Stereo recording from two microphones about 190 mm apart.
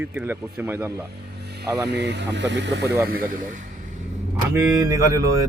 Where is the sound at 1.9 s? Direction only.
65° right (ahead or behind).